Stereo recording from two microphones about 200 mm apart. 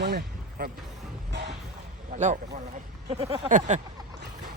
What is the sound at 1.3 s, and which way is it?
Music, 55° right (ahead or behind).